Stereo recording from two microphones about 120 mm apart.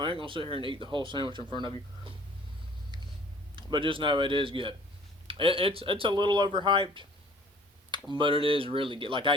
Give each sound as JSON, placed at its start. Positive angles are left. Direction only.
{"t": 0.0, "sound": "speech", "side_deg": -45}
{"t": 3.5, "sound": "speech", "side_deg": -45}
{"t": 8.1, "sound": "speech", "side_deg": -45}